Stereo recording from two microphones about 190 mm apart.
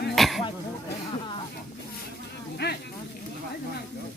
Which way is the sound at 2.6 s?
60° left (ahead or behind).